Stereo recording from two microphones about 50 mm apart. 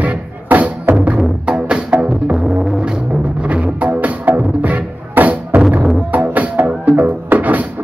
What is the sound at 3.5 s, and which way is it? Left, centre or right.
Music, right.